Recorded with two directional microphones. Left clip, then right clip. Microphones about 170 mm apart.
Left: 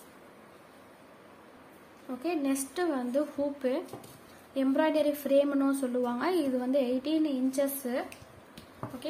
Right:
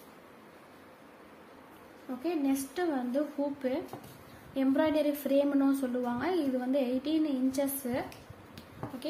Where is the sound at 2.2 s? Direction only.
25° left (ahead or behind).